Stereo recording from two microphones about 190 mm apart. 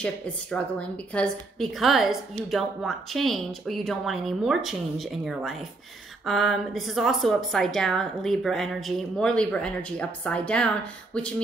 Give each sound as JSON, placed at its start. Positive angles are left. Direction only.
{"t": 0.0, "sound": "a woman's voice", "side_deg": 5}